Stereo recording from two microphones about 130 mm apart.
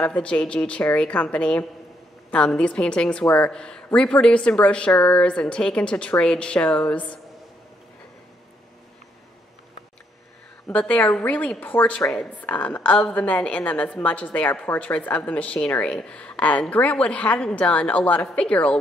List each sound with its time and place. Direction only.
0.0 s a woman's voice: 10° left (ahead or behind)
10.7 s a woman's voice: 10° left (ahead or behind)